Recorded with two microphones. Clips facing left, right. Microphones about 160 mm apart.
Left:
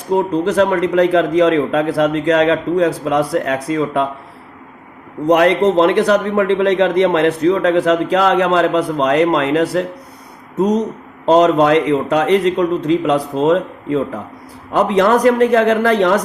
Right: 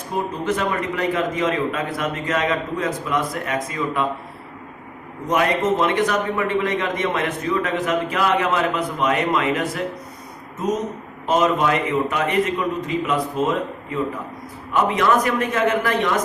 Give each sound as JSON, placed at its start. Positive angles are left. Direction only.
{"t": 0.4, "sound": "a man's voice", "side_deg": 75}
{"t": 5.2, "sound": "a man's voice", "side_deg": 70}